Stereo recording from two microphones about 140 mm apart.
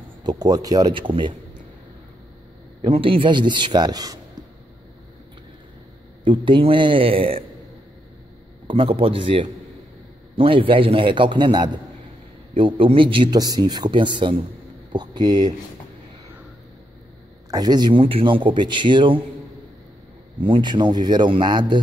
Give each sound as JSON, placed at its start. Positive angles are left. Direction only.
{"t": 0.2, "sound": "speech", "side_deg": -30}
{"t": 2.8, "sound": "speech", "side_deg": -40}
{"t": 6.2, "sound": "speech", "side_deg": -35}
{"t": 8.6, "sound": "speech", "side_deg": -40}
{"t": 17.5, "sound": "speech", "side_deg": -30}
{"t": 20.4, "sound": "speech", "side_deg": -35}